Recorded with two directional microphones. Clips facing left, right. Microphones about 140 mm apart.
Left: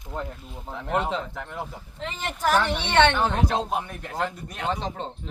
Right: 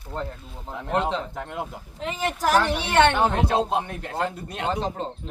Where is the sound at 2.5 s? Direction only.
10° right (ahead or behind).